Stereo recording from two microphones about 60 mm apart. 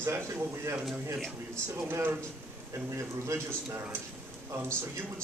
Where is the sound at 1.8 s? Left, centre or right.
Right.